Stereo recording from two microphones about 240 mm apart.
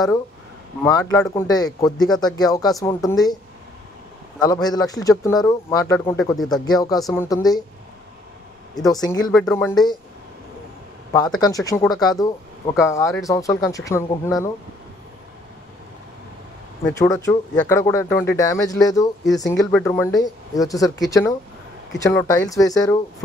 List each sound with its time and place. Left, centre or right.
0.8 s speech: centre
4.4 s speech: centre
6.6 s speech: centre
7.0 s speech: centre
7.2 s speech: centre
8.7 s speech: centre
9.3 s speech: centre
11.1 s speech: centre
16.8 s speech: centre